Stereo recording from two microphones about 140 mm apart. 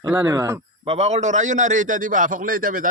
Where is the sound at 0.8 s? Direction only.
50° right (ahead or behind).